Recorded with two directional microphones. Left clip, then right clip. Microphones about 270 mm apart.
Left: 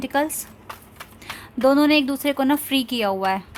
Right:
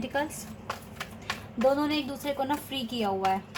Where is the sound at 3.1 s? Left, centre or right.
Left.